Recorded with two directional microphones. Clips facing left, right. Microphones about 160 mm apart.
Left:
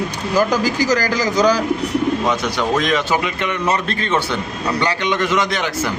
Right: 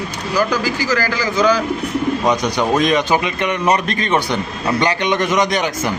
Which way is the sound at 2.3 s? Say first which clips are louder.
Right 3 dB; 20° right (ahead or behind).